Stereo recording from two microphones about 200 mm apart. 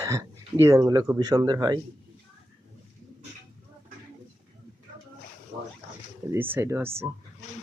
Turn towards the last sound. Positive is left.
turn(degrees=-10)  # may be behind; listen again after turning